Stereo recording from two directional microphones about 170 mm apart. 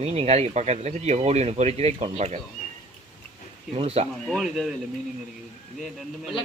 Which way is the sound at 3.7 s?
35° right (ahead or behind).